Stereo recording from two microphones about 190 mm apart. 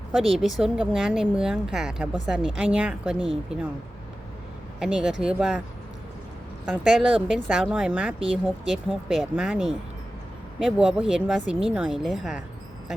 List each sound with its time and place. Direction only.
0.1 s speech: centre (ahead or behind)
4.8 s speech: 5° right (ahead or behind)
6.7 s speech: centre (ahead or behind)